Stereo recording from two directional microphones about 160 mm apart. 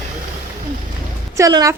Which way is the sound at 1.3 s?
20° right (ahead or behind).